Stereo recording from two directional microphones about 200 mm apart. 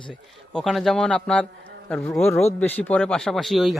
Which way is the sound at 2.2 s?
10° left (ahead or behind).